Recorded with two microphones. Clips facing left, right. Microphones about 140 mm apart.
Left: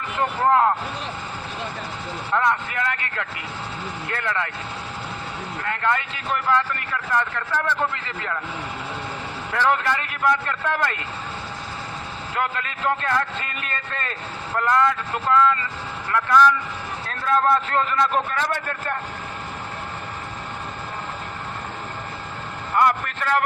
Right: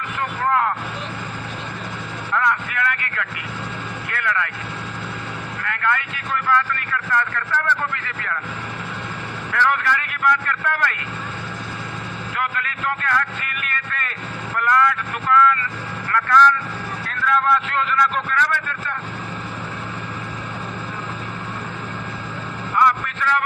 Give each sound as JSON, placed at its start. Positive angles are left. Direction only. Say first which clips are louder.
{"t": 0.2, "sound": "a man's voice", "louder": "left 3 dB", "side_deg": 25}
{"t": 2.3, "sound": "vehicle", "louder": "even", "side_deg": 25}
{"t": 4.1, "sound": "a man's voice", "louder": "right 2 dB", "side_deg": 25}
{"t": 5.6, "sound": "a man's voice", "louder": "even", "side_deg": 25}
{"t": 9.5, "sound": "a man's voice", "louder": "even", "side_deg": 25}
{"t": 12.4, "sound": "a man's voice", "louder": "left 1 dB", "side_deg": 25}
{"t": 17.1, "sound": "a man's voice", "louder": "even", "side_deg": 35}
{"t": 22.7, "sound": "vehicle", "louder": "right 1 dB", "side_deg": 40}